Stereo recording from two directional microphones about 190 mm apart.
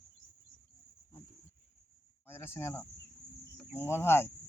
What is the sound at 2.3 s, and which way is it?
Speech, 10° left (ahead or behind).